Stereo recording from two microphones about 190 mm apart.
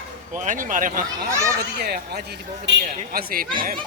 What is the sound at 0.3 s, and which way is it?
Speech, 45° right (ahead or behind).